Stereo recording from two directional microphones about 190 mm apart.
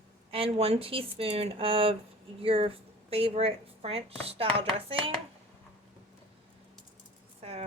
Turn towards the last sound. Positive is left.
turn(degrees=-30)  # may be behind; listen again after turning